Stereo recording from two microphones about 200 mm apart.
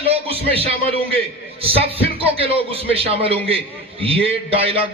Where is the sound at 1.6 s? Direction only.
30° right (ahead or behind).